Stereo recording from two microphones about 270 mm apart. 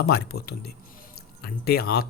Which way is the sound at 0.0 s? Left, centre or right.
Left.